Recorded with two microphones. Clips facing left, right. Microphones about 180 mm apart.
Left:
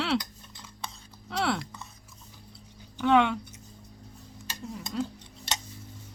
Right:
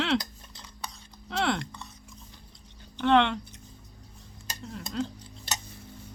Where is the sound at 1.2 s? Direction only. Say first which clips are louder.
Right 1 dB; centre (ahead or behind).